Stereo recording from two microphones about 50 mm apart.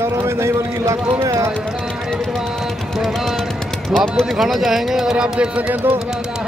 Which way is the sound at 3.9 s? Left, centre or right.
Centre.